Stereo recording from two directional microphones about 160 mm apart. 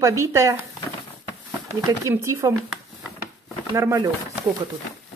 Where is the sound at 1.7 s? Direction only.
20° right (ahead or behind).